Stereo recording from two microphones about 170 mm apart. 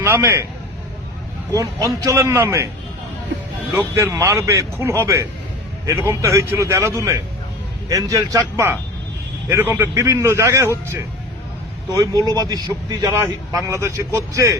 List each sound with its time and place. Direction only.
0.0 s a man's voice: 15° right (ahead or behind)
1.5 s speech: 20° right (ahead or behind)
3.7 s speech: 15° right (ahead or behind)